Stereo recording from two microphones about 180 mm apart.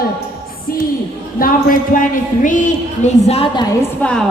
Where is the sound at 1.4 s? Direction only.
50° left (ahead or behind).